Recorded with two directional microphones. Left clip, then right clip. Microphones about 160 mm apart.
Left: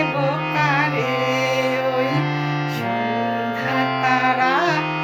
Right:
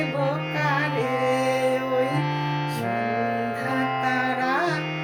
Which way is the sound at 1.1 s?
20° left (ahead or behind).